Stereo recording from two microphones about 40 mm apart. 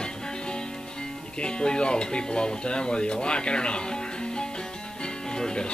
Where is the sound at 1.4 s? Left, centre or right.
Left.